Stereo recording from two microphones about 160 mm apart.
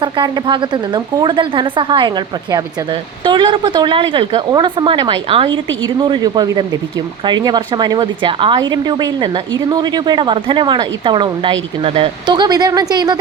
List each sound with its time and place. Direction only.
0.0 s a woman's voice: 30° right (ahead or behind)